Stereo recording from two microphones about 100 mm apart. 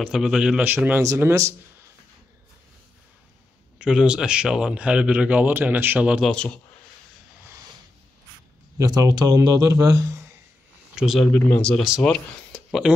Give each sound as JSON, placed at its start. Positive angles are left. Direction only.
{"t": 0.0, "sound": "a man's voice", "side_deg": -5}
{"t": 1.0, "sound": "speech", "side_deg": -30}
{"t": 3.7, "sound": "speech", "side_deg": -5}
{"t": 6.2, "sound": "speech", "side_deg": 10}
{"t": 8.7, "sound": "speech", "side_deg": -35}
{"t": 11.0, "sound": "a man's voice", "side_deg": -5}
{"t": 11.3, "sound": "speech", "side_deg": 15}